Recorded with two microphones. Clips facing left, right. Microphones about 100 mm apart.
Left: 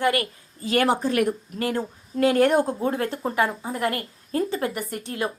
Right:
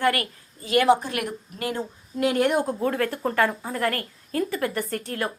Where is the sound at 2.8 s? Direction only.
25° left (ahead or behind).